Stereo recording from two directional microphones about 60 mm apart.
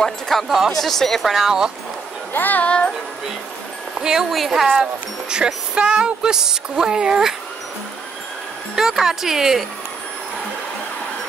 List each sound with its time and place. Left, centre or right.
0.0 s speech: centre
2.3 s speech: left
4.0 s speech: centre
8.7 s speech: centre